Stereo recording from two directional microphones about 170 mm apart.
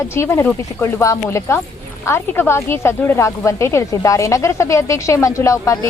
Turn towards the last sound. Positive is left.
turn(degrees=20)  # may be behind; listen again after turning